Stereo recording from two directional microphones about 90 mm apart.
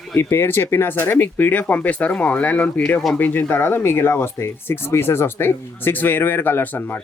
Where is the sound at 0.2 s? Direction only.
25° left (ahead or behind).